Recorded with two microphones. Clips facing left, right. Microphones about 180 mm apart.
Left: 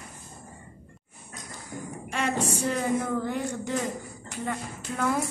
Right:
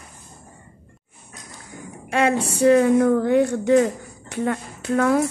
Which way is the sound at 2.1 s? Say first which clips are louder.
Right 8 dB; 65° right (ahead or behind).